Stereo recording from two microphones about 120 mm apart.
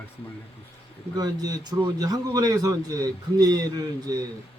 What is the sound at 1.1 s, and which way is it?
A man's voice, 35° right (ahead or behind).